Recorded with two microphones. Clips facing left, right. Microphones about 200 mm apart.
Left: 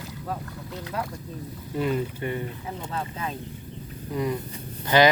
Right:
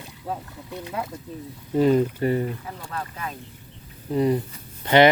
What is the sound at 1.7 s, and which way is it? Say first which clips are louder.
Speech: right 8 dB; 40° right (ahead or behind).